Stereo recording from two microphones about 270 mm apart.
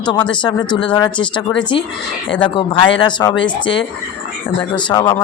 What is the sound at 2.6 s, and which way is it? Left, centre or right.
Speech, centre.